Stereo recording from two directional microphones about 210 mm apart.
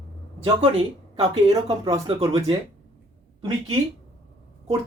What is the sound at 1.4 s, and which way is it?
Speech, 20° right (ahead or behind).